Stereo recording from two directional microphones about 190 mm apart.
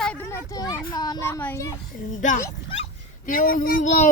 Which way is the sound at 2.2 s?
40° left (ahead or behind).